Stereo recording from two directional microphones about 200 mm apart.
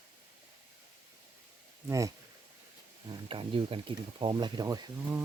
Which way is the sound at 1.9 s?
15° right (ahead or behind).